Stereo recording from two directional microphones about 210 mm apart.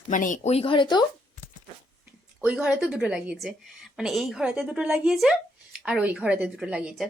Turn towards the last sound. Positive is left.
turn(degrees=-5)  # may be behind; listen again after turning